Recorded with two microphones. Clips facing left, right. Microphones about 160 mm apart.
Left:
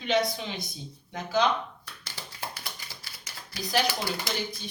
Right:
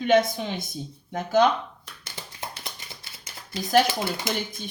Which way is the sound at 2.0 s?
20° right (ahead or behind).